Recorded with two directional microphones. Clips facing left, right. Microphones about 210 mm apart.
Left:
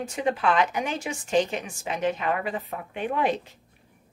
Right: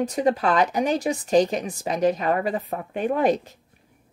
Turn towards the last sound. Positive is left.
turn(degrees=-40)  # may be behind; listen again after turning